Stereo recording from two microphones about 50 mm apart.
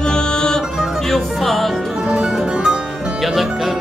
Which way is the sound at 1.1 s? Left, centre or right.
Centre.